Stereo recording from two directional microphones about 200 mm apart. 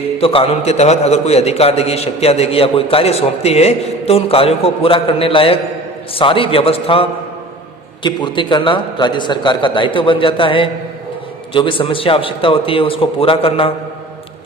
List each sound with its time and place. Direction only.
0.2 s a man's voice: 25° left (ahead or behind)